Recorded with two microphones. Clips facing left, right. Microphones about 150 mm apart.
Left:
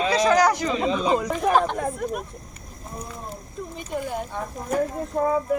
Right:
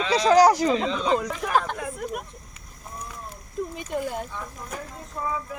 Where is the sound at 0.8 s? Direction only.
10° left (ahead or behind).